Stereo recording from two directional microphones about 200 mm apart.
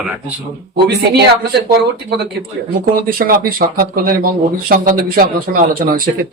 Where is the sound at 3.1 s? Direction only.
45° right (ahead or behind).